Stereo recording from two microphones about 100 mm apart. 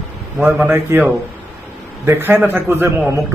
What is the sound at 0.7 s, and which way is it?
A man's voice, 20° right (ahead or behind).